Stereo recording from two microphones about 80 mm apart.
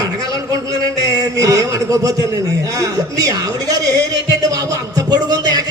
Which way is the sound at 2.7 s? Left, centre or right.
Right.